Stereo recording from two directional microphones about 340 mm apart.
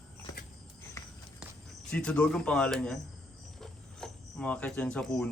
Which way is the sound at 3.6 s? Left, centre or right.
Centre.